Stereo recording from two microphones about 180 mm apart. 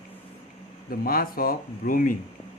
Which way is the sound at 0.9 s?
55° left (ahead or behind).